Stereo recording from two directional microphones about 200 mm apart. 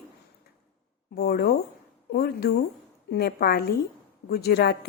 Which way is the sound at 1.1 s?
50° left (ahead or behind).